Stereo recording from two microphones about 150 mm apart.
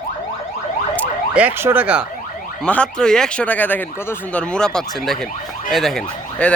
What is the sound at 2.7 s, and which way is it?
Speech, 5° left (ahead or behind).